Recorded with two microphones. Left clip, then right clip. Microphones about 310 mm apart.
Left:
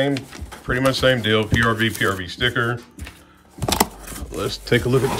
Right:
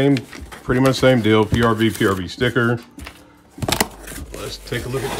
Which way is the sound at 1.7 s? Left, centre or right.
Centre.